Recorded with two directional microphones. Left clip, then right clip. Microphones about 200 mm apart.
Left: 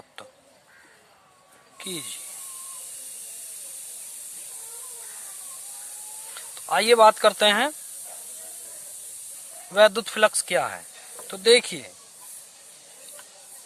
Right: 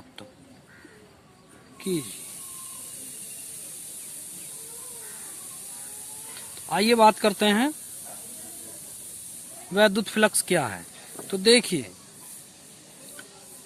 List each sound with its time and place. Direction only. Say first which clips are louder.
1.8 s speech: right 5 dB; 35° left (ahead or behind)
6.3 s speech: left 4 dB; 30° left (ahead or behind)
9.7 s speech: left 3 dB; 30° left (ahead or behind)